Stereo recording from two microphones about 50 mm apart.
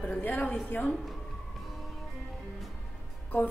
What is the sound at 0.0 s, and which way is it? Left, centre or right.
Speech, left.